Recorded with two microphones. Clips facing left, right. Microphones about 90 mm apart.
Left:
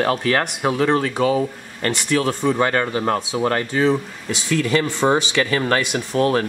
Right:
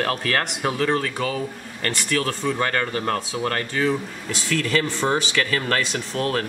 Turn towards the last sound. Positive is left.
turn(degrees=20)  # may be behind; listen again after turning